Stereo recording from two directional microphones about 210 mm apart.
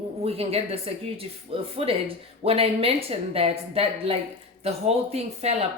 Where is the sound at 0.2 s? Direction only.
30° right (ahead or behind).